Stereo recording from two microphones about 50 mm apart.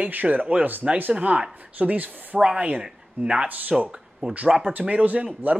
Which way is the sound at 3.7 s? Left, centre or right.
Centre.